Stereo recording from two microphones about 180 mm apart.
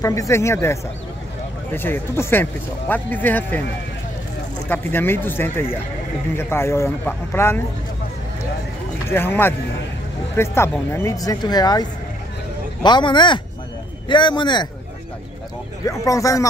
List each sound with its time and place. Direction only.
0.0 s a man's voice: 15° left (ahead or behind)
4.6 s a man's voice: 10° left (ahead or behind)
9.1 s a man's voice: 10° left (ahead or behind)
15.8 s a man's voice: 20° left (ahead or behind)